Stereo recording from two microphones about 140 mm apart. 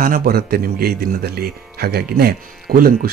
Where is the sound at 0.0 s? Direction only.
85° right.